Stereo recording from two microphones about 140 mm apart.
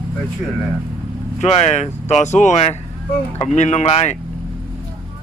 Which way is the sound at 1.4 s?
55° left (ahead or behind).